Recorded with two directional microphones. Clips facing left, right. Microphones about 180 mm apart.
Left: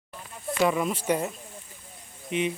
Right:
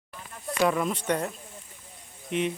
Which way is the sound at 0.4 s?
5° left (ahead or behind).